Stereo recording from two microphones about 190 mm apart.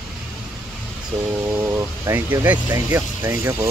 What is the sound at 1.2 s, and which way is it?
Speech, 10° right (ahead or behind).